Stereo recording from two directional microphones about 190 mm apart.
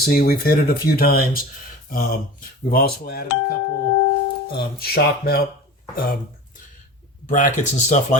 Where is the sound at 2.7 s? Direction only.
55° left (ahead or behind).